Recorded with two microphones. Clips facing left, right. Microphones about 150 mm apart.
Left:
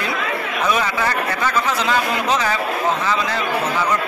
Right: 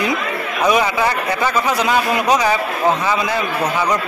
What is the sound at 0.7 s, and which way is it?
A man's voice, 15° right (ahead or behind).